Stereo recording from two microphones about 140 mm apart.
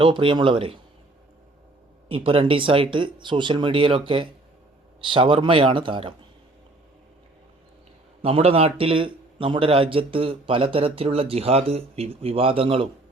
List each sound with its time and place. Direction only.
0.0 s speech: 35° right (ahead or behind)
2.0 s speech: 40° right (ahead or behind)
8.2 s a man's voice: 45° right (ahead or behind)